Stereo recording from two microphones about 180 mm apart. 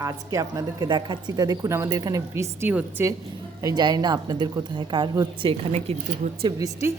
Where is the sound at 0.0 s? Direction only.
20° right (ahead or behind).